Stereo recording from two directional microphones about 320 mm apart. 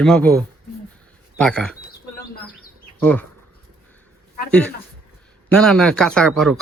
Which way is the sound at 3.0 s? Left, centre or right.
Centre.